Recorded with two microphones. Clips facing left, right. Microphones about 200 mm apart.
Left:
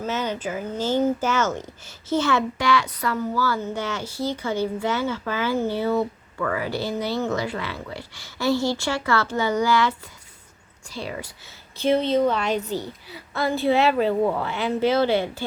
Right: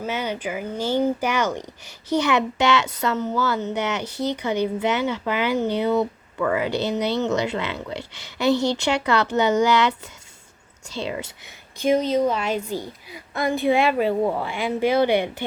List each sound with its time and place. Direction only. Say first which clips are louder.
0.0 s speech: even; 10° right (ahead or behind)
10.9 s speech: right 3 dB; 25° right (ahead or behind)
12.1 s a woman's voice: even; 10° right (ahead or behind)